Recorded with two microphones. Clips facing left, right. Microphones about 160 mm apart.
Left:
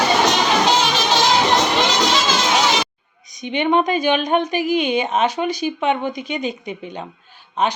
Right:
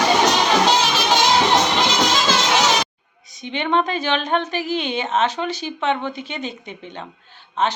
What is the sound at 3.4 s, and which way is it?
Speech, 15° left (ahead or behind).